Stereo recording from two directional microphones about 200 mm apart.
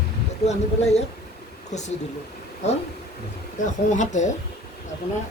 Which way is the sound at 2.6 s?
35° left (ahead or behind).